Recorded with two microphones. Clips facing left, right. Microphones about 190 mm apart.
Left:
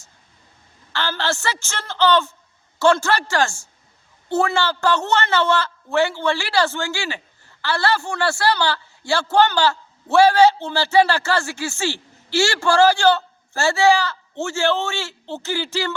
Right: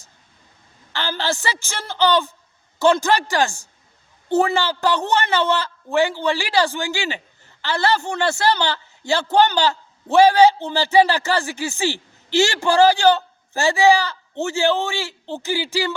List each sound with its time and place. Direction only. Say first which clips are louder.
0.9 s a man's voice: even; 15° right (ahead or behind)